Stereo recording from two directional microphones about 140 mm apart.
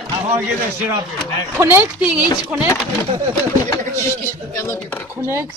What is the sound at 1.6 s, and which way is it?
Speech, 15° right (ahead or behind).